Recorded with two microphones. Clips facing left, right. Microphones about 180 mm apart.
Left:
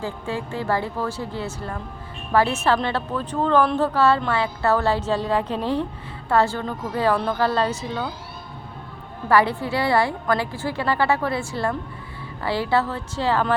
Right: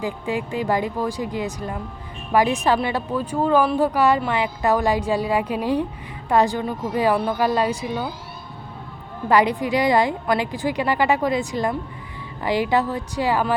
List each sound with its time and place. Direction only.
0.0 s speech: 15° right (ahead or behind)
9.3 s speech: 15° right (ahead or behind)